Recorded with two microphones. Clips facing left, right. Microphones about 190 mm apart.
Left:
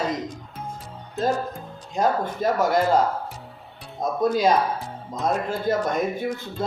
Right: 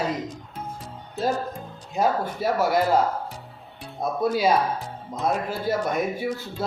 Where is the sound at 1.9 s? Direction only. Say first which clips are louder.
Left 1 dB; 5° right (ahead or behind).